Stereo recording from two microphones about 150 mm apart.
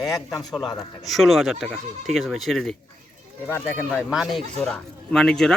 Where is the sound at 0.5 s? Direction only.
Centre (ahead or behind).